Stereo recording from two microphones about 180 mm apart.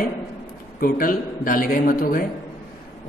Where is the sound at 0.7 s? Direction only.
50° left (ahead or behind).